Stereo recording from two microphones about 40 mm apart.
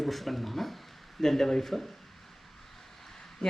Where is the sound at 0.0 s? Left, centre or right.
Centre.